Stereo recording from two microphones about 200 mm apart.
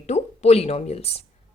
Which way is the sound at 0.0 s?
35° left (ahead or behind).